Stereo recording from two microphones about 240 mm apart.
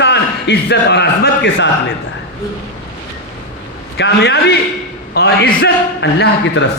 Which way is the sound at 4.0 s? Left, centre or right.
Left.